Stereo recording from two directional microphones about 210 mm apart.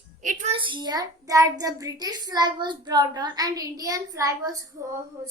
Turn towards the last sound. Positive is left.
turn(degrees=-15)  # may be behind; listen again after turning